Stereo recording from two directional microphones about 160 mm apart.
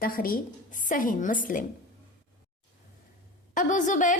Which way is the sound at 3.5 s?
55° left (ahead or behind).